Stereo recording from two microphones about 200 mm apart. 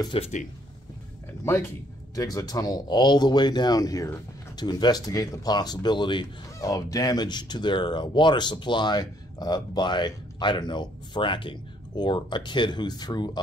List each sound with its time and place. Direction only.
0.0 s speech: 25° left (ahead or behind)
1.4 s speech: 15° left (ahead or behind)